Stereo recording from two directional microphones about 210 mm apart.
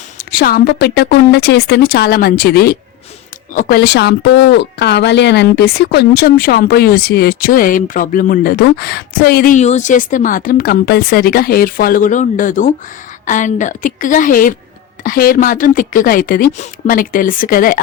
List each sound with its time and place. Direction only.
0.2 s speech: 45° left (ahead or behind)